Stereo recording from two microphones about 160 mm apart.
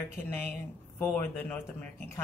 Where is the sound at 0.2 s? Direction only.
10° left (ahead or behind).